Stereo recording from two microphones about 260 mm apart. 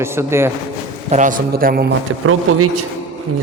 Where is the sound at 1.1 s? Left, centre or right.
Right.